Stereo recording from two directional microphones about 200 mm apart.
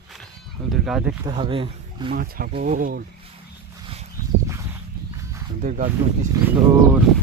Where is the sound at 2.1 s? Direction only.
45° right (ahead or behind).